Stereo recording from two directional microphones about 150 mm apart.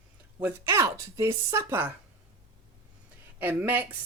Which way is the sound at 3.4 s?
10° right (ahead or behind).